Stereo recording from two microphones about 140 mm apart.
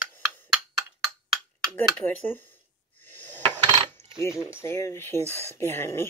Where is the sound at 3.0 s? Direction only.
15° left (ahead or behind).